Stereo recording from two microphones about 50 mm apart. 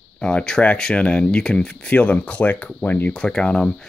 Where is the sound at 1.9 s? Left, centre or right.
Left.